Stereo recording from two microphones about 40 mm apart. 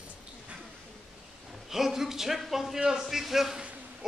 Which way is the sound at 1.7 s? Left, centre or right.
Centre.